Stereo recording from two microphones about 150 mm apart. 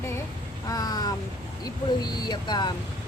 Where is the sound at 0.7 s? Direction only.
25° left (ahead or behind).